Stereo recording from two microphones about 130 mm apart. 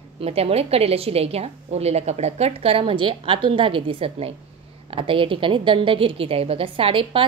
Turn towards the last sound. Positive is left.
turn(degrees=-45)  # may be behind; listen again after turning